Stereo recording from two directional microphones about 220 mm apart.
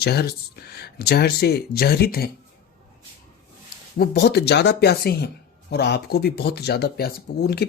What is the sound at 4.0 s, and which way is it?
Speech, 45° left (ahead or behind).